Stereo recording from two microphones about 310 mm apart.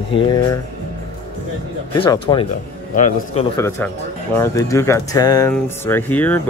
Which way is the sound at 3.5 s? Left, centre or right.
Centre.